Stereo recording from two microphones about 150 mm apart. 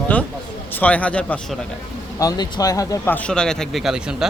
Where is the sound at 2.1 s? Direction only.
25° left (ahead or behind).